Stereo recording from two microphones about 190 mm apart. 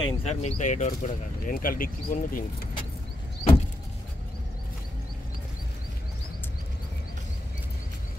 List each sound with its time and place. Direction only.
0.0 s speech: 35° left (ahead or behind)